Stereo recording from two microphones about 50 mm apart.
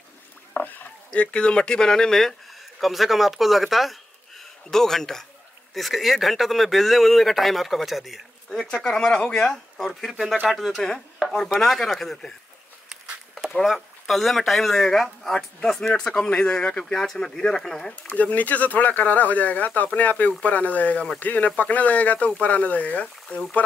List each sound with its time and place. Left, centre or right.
0.5 s rowboat: left
1.1 s speech: left; by 8.2 s centre
8.5 s speech: centre
13.7 s speech: centre
16.9 s speech: centre
18.0 s speech: left